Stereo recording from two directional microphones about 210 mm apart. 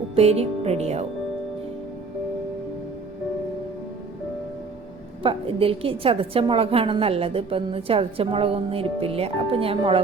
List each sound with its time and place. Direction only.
0.2 s a woman's voice: 30° right (ahead or behind)
5.2 s a woman's voice: 25° right (ahead or behind)